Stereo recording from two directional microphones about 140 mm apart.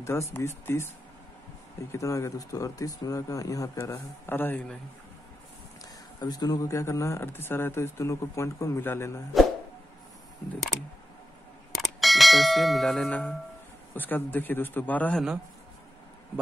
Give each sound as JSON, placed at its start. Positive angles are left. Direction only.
{"t": 0.0, "sound": "speech", "side_deg": 20}
{"t": 6.1, "sound": "speech", "side_deg": 30}
{"t": 11.7, "sound": "bell", "side_deg": 0}
{"t": 13.9, "sound": "speech", "side_deg": 15}